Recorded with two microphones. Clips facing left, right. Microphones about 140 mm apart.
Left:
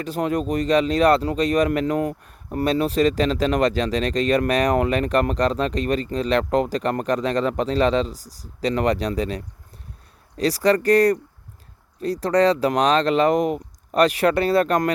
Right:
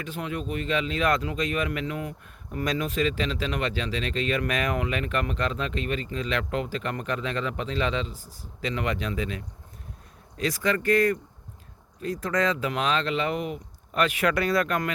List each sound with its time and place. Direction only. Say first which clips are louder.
0.0 s speech: left 9 dB; 40° left (ahead or behind)